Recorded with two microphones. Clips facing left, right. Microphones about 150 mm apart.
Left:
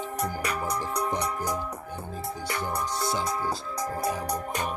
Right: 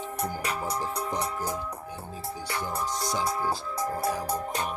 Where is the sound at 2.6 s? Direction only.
65° left (ahead or behind).